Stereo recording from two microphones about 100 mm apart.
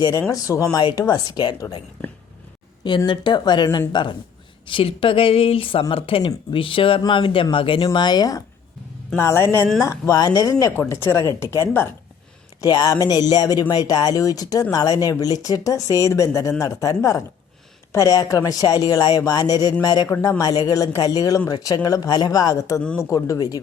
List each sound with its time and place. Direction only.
0.0 s speech: 35° left (ahead or behind)
3.1 s speech: 45° left (ahead or behind)
4.6 s speech: 65° left (ahead or behind)
7.9 s speech: 45° left (ahead or behind)
9.1 s speech: 25° left (ahead or behind)
10.7 s speech: 25° left (ahead or behind)
12.6 s speech: 45° left (ahead or behind)